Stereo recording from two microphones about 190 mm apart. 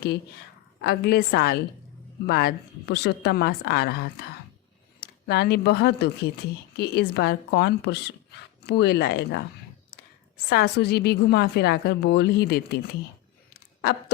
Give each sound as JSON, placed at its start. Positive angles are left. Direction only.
{"t": 0.8, "sound": "a woman's voice", "side_deg": 55}